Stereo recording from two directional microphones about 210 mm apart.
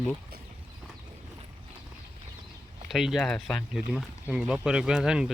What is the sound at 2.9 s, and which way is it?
Speech, centre (ahead or behind).